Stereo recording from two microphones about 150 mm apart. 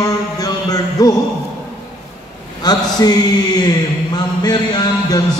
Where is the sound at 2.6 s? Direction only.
25° left (ahead or behind).